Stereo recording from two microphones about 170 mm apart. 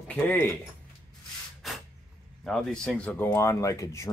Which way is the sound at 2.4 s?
5° left (ahead or behind).